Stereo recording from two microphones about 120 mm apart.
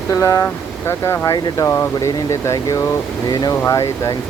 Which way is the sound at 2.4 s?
30° left (ahead or behind).